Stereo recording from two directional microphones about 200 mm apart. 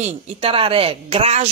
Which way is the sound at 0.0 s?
30° right (ahead or behind).